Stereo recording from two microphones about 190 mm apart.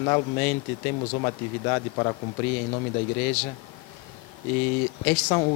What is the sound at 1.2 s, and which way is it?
Speech, 25° left (ahead or behind).